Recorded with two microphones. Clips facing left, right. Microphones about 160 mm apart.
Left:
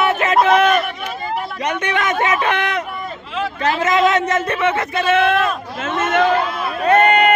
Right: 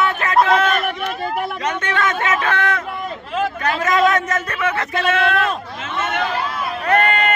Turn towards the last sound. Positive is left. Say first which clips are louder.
# left 4 dB
turn(degrees=20)  # may be behind; listen again after turning